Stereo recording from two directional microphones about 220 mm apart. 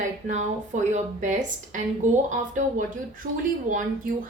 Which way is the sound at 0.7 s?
35° right (ahead or behind).